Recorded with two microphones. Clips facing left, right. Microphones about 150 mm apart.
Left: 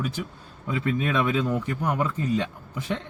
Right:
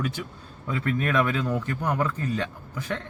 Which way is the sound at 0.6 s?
20° left (ahead or behind).